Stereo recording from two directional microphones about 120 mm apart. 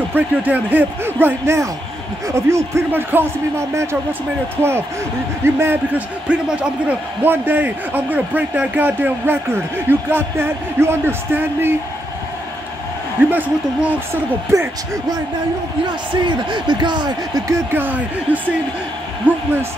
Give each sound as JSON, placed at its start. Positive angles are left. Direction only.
{"t": 0.1, "sound": "a man's voice", "side_deg": -15}
{"t": 13.3, "sound": "a man's voice", "side_deg": -15}
{"t": 14.5, "sound": "speech", "side_deg": -25}
{"t": 16.3, "sound": "speech", "side_deg": -40}
{"t": 17.5, "sound": "a man's voice", "side_deg": -20}